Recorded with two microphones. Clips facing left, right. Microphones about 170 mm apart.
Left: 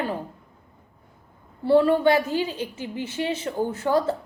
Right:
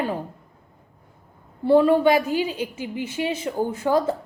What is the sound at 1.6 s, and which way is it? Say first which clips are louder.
A woman's voice: right 2 dB; 15° right (ahead or behind).